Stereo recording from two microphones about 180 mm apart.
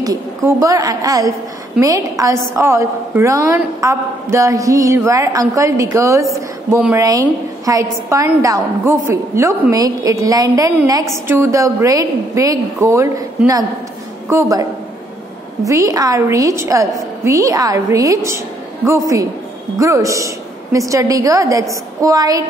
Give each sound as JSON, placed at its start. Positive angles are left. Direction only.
{"t": 0.0, "sound": "a woman's voice", "side_deg": -20}
{"t": 14.3, "sound": "a woman's voice", "side_deg": -20}